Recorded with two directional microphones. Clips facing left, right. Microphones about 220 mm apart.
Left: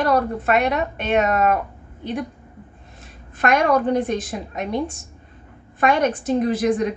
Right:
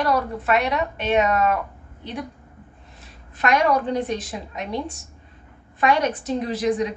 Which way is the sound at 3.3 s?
50° left (ahead or behind).